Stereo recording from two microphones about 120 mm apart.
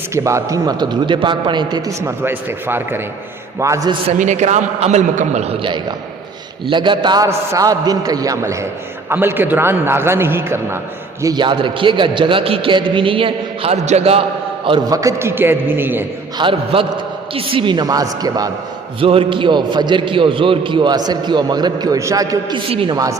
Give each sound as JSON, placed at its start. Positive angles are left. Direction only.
{"t": 0.1, "sound": "a man's voice", "side_deg": -25}
{"t": 2.0, "sound": "a man's voice", "side_deg": -20}
{"t": 4.2, "sound": "a man's voice", "side_deg": -75}
{"t": 6.7, "sound": "a man's voice", "side_deg": -45}
{"t": 11.2, "sound": "a man's voice", "side_deg": -35}
{"t": 13.8, "sound": "a man's voice", "side_deg": -60}
{"t": 14.8, "sound": "a man's voice", "side_deg": -25}
{"t": 16.4, "sound": "a man's voice", "side_deg": -45}
{"t": 18.9, "sound": "a man's voice", "side_deg": -50}
{"t": 22.5, "sound": "a man's voice", "side_deg": -45}